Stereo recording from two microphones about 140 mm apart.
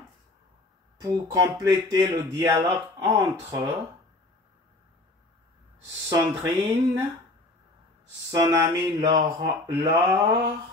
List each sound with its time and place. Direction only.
0.9 s speech: 25° right (ahead or behind)
6.0 s speech: 20° right (ahead or behind)
8.3 s speech: 25° right (ahead or behind)